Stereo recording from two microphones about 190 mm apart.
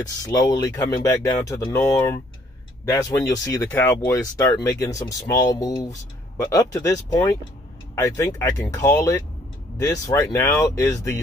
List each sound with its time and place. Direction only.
0.0 s speech: 20° left (ahead or behind)